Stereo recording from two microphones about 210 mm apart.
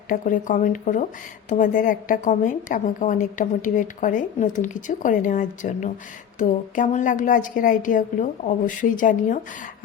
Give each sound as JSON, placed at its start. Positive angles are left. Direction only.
{"t": 0.1, "sound": "a woman's voice", "side_deg": 40}